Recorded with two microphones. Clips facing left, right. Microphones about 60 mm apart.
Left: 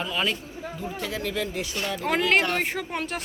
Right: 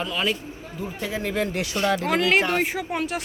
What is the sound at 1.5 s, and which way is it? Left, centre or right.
Speech, right.